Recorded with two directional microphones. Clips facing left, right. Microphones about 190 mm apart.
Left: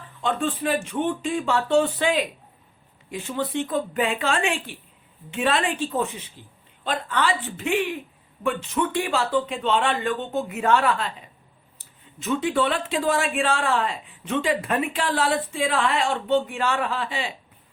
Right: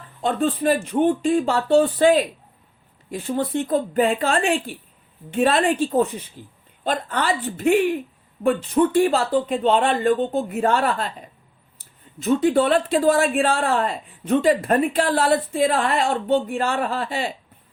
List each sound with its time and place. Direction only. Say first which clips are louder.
0.2 s speech: right 4 dB; 35° right (ahead or behind)
12.2 s speech: right 5 dB; 40° right (ahead or behind)